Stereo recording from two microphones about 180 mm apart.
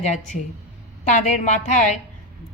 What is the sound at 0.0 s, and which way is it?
A woman's voice, 40° left (ahead or behind).